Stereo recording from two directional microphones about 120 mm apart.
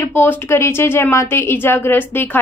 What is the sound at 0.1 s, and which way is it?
A woman's voice, 15° left (ahead or behind).